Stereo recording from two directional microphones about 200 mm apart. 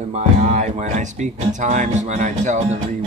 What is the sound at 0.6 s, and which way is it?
Speech, 35° right (ahead or behind).